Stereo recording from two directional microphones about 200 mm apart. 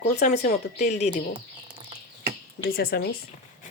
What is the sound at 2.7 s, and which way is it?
Speech, 50° left (ahead or behind).